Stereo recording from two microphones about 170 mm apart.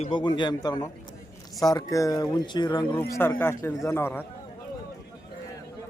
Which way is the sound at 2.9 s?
10° left (ahead or behind).